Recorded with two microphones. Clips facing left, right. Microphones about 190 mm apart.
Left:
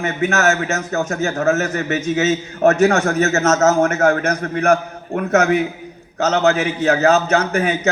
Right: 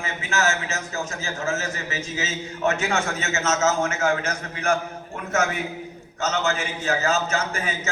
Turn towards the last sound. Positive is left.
turn(degrees=60)  # may be behind; listen again after turning